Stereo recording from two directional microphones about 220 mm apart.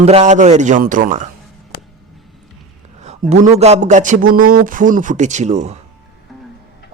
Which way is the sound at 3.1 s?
30° right (ahead or behind).